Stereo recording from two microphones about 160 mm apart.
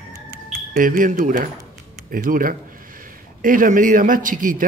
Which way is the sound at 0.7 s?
60° right (ahead or behind).